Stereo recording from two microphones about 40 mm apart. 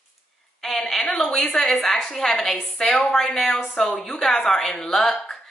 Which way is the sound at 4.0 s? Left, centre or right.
Centre.